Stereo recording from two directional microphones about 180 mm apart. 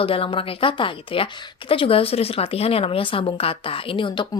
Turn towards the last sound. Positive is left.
turn(degrees=30)  # may be behind; listen again after turning